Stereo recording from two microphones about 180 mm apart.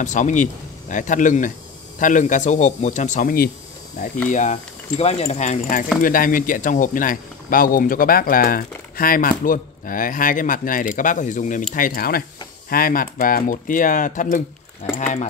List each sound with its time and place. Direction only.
0.0 s speech: 45° left (ahead or behind)
4.3 s speech: 40° left (ahead or behind)